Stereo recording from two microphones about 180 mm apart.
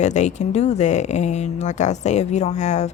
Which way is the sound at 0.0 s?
40° left (ahead or behind).